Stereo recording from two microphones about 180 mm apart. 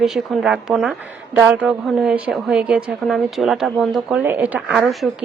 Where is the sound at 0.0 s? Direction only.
Centre (ahead or behind).